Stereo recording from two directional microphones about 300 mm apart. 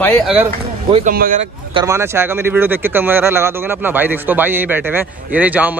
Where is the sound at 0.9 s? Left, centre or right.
Right.